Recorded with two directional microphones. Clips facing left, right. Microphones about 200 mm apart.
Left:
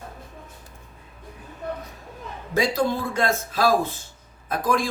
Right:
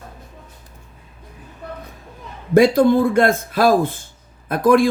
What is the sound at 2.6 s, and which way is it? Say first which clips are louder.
Speech: right 10 dB; 55° right (ahead or behind).